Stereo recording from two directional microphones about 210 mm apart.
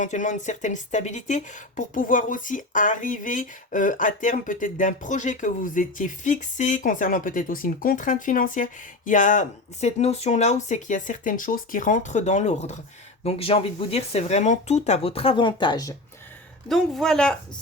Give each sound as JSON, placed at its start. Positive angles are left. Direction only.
{"t": 0.0, "sound": "speech", "side_deg": 35}
{"t": 16.6, "sound": "speech", "side_deg": 0}